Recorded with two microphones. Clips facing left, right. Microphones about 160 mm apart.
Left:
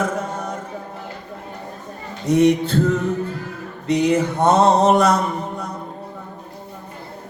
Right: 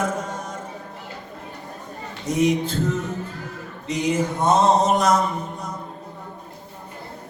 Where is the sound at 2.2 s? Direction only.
65° left (ahead or behind).